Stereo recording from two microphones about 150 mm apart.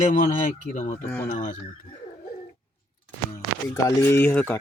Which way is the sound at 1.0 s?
10° left (ahead or behind).